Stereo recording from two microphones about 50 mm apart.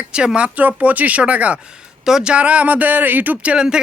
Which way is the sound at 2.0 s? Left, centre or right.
Centre.